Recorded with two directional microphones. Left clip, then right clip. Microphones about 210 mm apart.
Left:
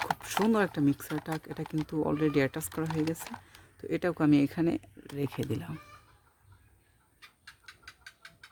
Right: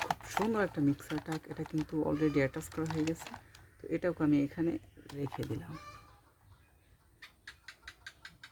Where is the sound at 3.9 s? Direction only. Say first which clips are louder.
Left 4 dB; 45° left (ahead or behind).